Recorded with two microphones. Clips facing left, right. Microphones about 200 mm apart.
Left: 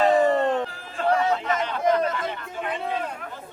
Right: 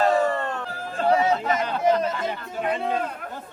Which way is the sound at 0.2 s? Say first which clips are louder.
Left 4 dB; 20° left (ahead or behind).